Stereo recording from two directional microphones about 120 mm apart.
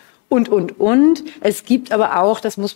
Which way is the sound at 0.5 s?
25° left (ahead or behind).